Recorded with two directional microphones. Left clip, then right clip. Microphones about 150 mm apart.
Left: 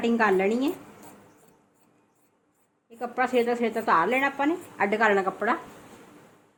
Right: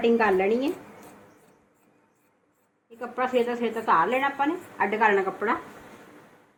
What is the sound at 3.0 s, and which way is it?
A woman's voice, 65° left (ahead or behind).